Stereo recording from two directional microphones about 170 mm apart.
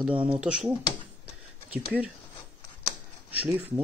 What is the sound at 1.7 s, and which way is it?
Speech, 5° right (ahead or behind).